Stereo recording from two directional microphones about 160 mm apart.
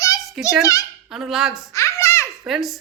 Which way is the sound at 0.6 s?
20° left (ahead or behind).